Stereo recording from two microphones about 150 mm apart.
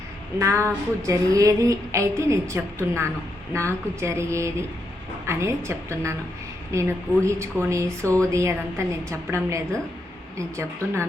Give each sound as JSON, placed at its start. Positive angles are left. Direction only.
{"t": 0.3, "sound": "speech", "side_deg": -20}